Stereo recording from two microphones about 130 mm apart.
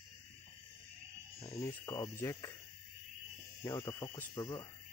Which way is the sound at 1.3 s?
50° left (ahead or behind).